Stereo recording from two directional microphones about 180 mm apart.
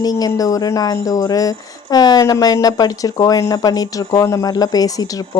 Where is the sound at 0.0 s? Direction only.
20° left (ahead or behind).